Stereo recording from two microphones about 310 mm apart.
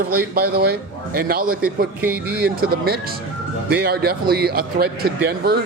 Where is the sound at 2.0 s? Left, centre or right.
Centre.